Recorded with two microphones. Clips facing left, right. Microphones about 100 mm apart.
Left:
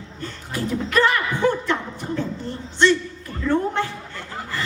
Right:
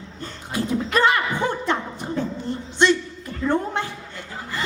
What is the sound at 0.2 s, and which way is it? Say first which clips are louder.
Speech: right 1 dB; 20° right (ahead or behind).